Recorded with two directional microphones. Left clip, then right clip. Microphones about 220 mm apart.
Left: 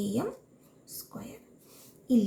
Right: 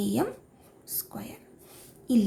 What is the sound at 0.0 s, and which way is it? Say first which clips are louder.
Speech: right 4 dB; 40° right (ahead or behind).